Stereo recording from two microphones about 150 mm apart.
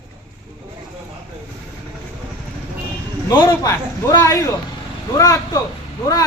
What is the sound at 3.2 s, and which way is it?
A man's voice, 20° left (ahead or behind).